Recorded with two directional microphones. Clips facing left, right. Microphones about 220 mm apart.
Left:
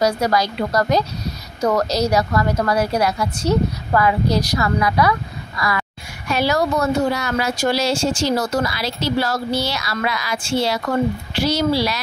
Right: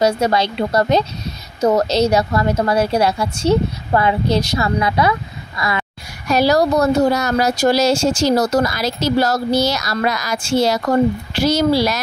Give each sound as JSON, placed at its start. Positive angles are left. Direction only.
{"t": 0.0, "sound": "a woman's voice", "side_deg": -25}
{"t": 6.2, "sound": "speech", "side_deg": -40}